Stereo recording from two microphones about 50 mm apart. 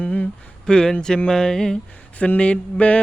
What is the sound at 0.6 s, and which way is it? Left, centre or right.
Speech, centre.